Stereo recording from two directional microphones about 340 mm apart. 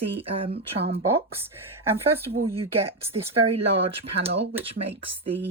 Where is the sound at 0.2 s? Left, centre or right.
Centre.